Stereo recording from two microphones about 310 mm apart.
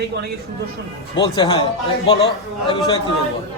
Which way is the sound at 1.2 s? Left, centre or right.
Centre.